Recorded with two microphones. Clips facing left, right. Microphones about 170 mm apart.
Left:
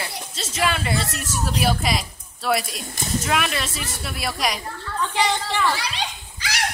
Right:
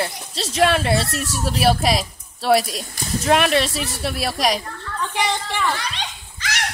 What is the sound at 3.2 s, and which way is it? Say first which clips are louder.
Speech: right 10 dB; 65° right (ahead or behind).